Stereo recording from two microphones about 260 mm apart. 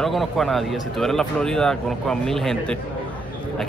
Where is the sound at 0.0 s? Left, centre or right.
Centre.